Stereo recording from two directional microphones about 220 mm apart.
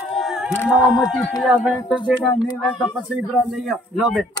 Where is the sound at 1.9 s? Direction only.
20° left (ahead or behind).